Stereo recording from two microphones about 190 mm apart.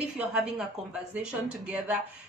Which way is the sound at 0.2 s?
5° right (ahead or behind).